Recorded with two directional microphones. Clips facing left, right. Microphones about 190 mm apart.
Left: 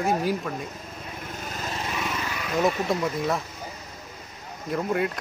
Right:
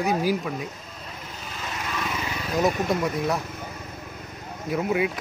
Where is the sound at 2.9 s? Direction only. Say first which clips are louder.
Right 1 dB; centre (ahead or behind).